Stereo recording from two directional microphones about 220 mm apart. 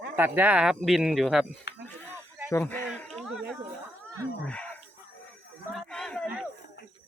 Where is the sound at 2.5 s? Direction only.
10° left (ahead or behind).